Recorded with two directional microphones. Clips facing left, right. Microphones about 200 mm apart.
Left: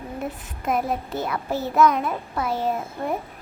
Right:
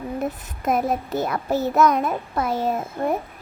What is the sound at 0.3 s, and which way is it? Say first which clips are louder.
A child's voice: right 2 dB; 40° right (ahead or behind).